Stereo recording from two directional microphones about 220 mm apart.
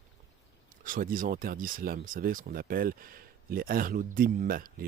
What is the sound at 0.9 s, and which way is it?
Speech, 40° right (ahead or behind).